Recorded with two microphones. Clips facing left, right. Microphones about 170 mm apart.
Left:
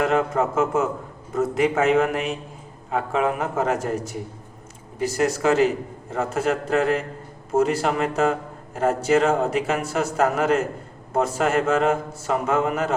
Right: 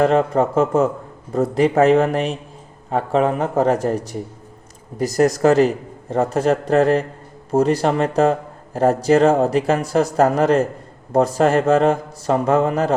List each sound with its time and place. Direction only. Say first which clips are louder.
0.0 s speech: right 5 dB; 35° right (ahead or behind)